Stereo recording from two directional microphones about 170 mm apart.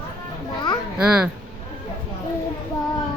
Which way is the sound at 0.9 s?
5° right (ahead or behind).